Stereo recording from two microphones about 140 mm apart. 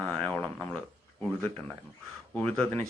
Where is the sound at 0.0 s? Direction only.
10° left (ahead or behind).